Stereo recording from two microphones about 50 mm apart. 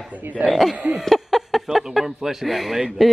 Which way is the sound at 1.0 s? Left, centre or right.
Centre.